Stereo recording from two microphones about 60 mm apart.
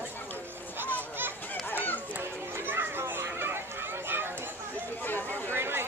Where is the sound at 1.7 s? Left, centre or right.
Left.